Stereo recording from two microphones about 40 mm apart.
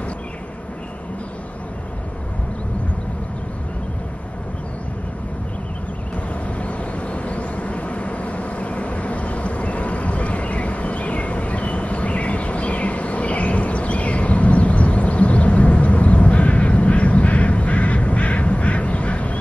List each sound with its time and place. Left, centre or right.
6.6 s vehicle: left